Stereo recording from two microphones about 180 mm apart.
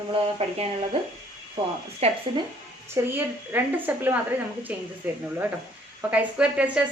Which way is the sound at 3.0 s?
15° right (ahead or behind).